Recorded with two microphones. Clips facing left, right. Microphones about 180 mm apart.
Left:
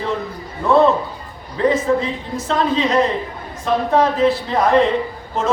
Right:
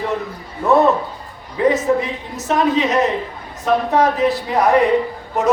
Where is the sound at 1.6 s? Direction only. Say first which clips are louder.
Right 1 dB; 20° right (ahead or behind).